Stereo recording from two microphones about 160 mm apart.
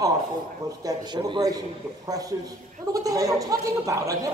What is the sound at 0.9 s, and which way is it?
Speech, 20° right (ahead or behind).